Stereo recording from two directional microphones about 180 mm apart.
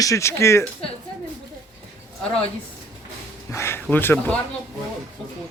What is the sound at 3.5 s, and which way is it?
Speech, 15° left (ahead or behind).